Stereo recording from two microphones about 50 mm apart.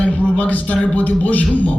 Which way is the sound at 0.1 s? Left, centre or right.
Left.